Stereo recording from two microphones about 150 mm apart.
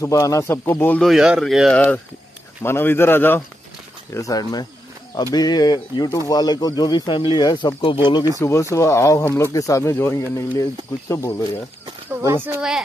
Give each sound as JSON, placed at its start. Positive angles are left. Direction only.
{"t": 0.0, "sound": "speech", "side_deg": 20}
{"t": 1.0, "sound": "speech", "side_deg": -5}
{"t": 2.6, "sound": "a man's voice", "side_deg": 15}
{"t": 12.4, "sound": "speech", "side_deg": -10}